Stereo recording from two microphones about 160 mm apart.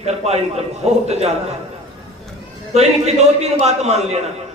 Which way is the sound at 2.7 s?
40° right (ahead or behind).